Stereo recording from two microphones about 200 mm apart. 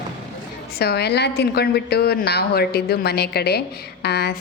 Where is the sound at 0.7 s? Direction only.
55° left (ahead or behind).